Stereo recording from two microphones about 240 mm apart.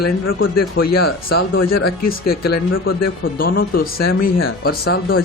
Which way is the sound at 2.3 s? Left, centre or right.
Left.